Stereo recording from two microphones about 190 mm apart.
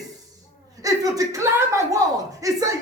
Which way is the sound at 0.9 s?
20° right (ahead or behind).